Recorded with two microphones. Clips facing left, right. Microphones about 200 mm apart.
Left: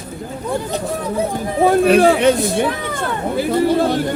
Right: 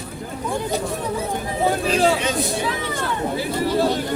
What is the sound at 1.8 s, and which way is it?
Speech, 60° left (ahead or behind).